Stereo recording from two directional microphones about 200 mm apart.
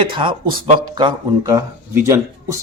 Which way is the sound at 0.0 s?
25° right (ahead or behind).